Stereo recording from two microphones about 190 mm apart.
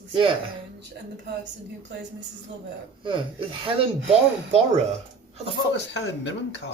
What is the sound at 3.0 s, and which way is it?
Speech, 25° right (ahead or behind).